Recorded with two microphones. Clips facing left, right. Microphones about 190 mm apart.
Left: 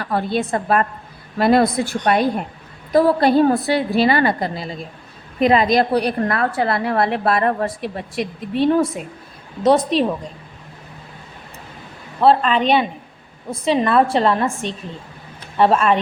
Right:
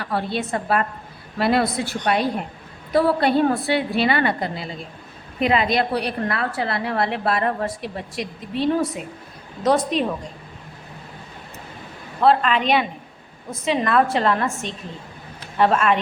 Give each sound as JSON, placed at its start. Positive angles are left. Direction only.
{"t": 0.0, "sound": "a woman's voice", "side_deg": 45}
{"t": 12.2, "sound": "a woman's voice", "side_deg": 30}